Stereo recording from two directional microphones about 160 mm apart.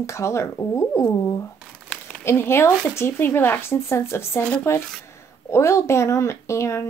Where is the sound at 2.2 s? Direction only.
15° left (ahead or behind).